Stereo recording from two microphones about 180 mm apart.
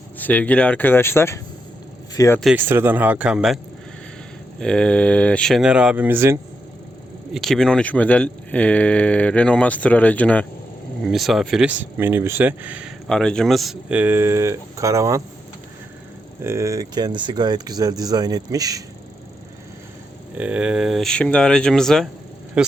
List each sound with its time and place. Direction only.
0.2 s speech: 10° left (ahead or behind)
2.4 s speech: 5° right (ahead or behind)
4.6 s speech: 5° left (ahead or behind); by 6.4 s 15° right (ahead or behind)
7.3 s speech: centre (ahead or behind)
13.1 s speech: 5° left (ahead or behind); by 15.2 s 20° right (ahead or behind)
16.4 s speech: 15° right (ahead or behind)
20.3 s speech: 5° right (ahead or behind)